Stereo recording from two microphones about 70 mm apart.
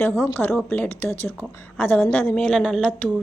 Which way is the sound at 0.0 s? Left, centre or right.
Left.